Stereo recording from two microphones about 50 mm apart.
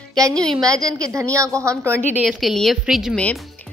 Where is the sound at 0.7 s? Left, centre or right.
Right.